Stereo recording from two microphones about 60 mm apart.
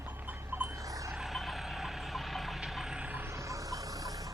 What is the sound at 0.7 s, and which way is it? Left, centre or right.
Vehicle, right.